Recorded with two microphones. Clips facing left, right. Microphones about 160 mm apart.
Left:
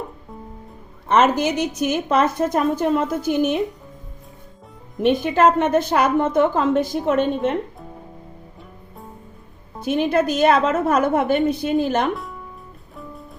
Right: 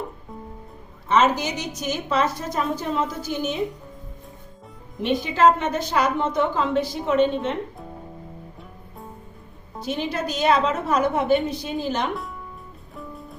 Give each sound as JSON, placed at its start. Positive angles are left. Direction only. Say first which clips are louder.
{"t": 1.0, "sound": "a woman's voice", "louder": "left 3 dB", "side_deg": 55}
{"t": 5.2, "sound": "a woman's voice", "louder": "right 1 dB", "side_deg": 55}
{"t": 9.8, "sound": "a woman's voice", "louder": "left 8 dB", "side_deg": 55}
{"t": 12.1, "sound": "speech", "louder": "left 1 dB", "side_deg": 0}